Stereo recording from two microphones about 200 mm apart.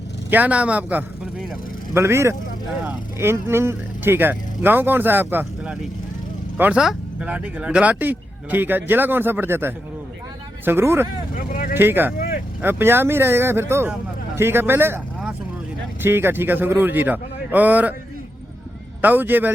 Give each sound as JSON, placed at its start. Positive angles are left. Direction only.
{"t": 0.3, "sound": "speech", "side_deg": -10}
{"t": 11.3, "sound": "vehicle", "side_deg": 45}
{"t": 11.7, "sound": "speech", "side_deg": -10}
{"t": 19.0, "sound": "speech", "side_deg": -10}